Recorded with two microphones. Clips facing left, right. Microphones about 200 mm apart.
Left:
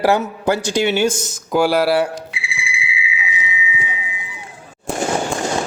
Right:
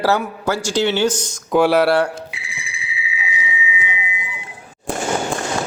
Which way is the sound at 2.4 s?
40° right (ahead or behind).